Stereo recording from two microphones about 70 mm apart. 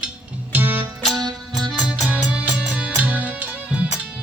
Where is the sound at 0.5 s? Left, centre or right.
Right.